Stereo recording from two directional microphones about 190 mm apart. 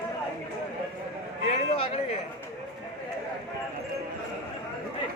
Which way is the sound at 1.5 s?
30° left (ahead or behind).